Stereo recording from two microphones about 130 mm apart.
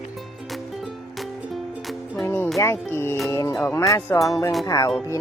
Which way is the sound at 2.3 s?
15° left (ahead or behind).